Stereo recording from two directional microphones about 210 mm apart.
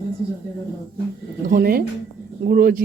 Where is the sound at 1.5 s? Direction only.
45° right (ahead or behind).